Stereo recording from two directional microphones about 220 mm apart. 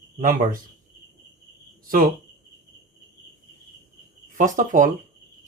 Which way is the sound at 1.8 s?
40° right (ahead or behind).